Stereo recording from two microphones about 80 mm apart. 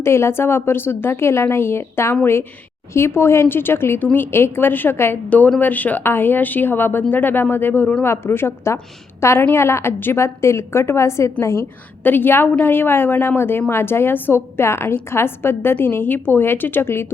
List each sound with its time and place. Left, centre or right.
0.0 s a woman's voice: left
12.0 s a woman's voice: left